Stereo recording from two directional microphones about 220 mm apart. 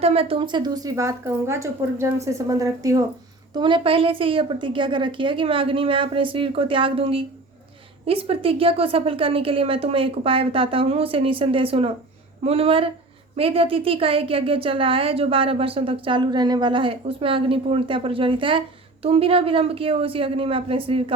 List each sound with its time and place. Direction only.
0.0 s a woman's voice: 25° right (ahead or behind)